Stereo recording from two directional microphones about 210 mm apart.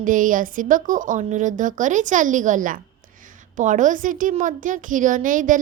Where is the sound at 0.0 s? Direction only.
40° right (ahead or behind).